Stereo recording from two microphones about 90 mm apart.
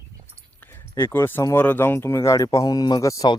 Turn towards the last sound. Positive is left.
turn(degrees=40)  # may be behind; listen again after turning